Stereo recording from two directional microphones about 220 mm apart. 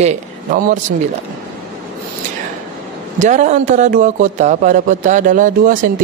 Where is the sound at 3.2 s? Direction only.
35° right (ahead or behind).